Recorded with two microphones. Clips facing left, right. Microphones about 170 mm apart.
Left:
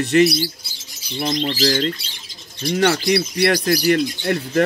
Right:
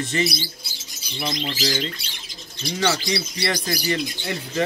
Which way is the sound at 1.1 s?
45° left (ahead or behind).